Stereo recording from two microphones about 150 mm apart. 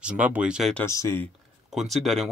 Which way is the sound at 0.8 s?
20° left (ahead or behind).